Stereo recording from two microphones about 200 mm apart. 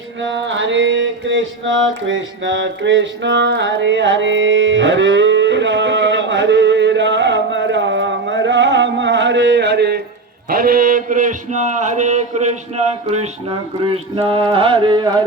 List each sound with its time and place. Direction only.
0.2 s mantra: 65° right (ahead or behind)
10.5 s a man's voice: 45° right (ahead or behind); by 15.2 s 20° right (ahead or behind)